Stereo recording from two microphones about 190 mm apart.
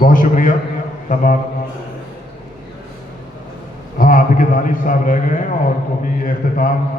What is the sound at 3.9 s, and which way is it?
A man's voice, 45° left (ahead or behind).